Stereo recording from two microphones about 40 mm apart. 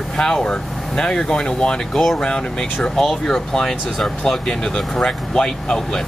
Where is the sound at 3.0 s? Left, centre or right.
Centre.